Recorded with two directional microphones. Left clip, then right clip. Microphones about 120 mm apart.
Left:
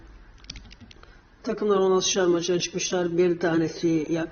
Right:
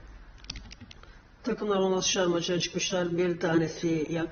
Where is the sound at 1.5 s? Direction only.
30° left (ahead or behind).